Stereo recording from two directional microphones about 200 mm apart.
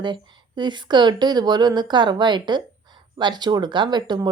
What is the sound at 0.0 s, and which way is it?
Speech, 25° right (ahead or behind).